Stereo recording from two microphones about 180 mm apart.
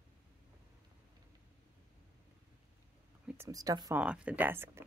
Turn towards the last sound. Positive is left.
turn(degrees=-15)  # may be behind; listen again after turning